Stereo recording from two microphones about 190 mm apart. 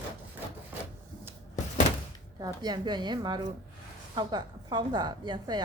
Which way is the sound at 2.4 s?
20° right (ahead or behind).